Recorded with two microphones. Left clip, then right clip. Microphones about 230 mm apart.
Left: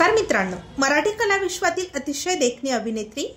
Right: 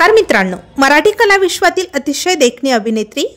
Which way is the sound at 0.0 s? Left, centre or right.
Right.